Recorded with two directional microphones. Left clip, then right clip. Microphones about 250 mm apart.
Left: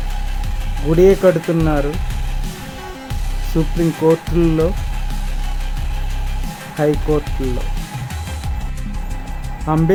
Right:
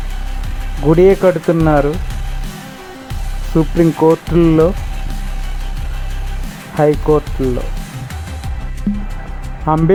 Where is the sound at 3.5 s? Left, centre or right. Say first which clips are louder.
Right 6 dB; centre.